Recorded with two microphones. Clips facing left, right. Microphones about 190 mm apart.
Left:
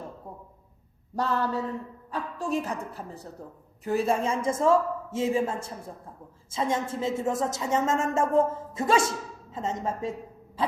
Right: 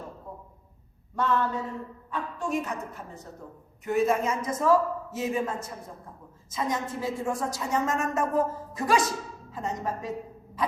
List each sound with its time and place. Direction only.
1.1 s a woman's voice: 35° left (ahead or behind)